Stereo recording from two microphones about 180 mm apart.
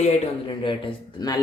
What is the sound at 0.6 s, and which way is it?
Speech, 25° left (ahead or behind).